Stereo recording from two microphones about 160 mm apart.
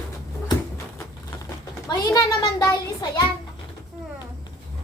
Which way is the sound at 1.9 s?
20° left (ahead or behind).